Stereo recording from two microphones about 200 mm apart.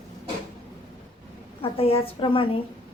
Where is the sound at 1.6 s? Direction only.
30° left (ahead or behind).